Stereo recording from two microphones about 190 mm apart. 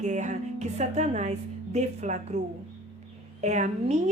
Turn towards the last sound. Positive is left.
turn(degrees=-40)  # may be behind; listen again after turning